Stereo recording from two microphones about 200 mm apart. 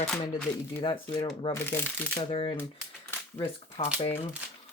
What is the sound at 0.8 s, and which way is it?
Speech, 25° left (ahead or behind).